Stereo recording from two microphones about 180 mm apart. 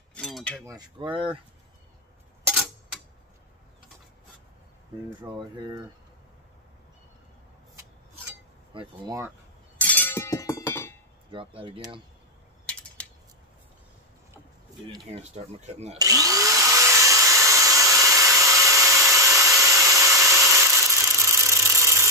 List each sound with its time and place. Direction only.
0.1 s a sound: 5° left (ahead or behind)
0.9 s speech: 30° right (ahead or behind)
2.4 s clock: centre (ahead or behind)
5.6 s speech: 25° right (ahead or behind)
8.7 s speech: 20° right (ahead or behind)
9.8 s chink: 10° left (ahead or behind)
11.3 s speech: 30° right (ahead or behind)
12.6 s a sound: 5° left (ahead or behind)
15.0 s speech: 40° right (ahead or behind)
16.0 s vacuum cleaner: 20° right (ahead or behind)